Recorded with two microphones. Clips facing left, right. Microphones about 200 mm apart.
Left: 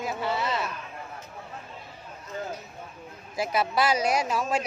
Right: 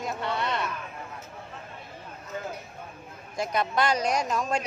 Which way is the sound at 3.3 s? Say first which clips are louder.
Left 1 dB; 5° left (ahead or behind).